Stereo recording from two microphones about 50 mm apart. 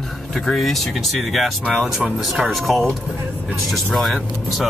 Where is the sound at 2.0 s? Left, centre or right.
Centre.